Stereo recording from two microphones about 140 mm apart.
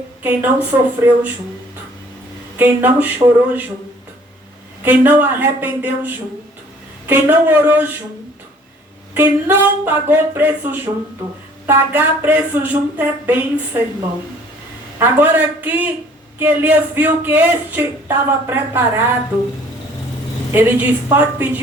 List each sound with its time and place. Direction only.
0.2 s speech: 15° right (ahead or behind)
2.6 s speech: 15° right (ahead or behind)
4.8 s speech: 15° right (ahead or behind)
9.1 s speech: 15° right (ahead or behind)
14.9 s speech: 15° right (ahead or behind)
20.5 s speech: 15° right (ahead or behind)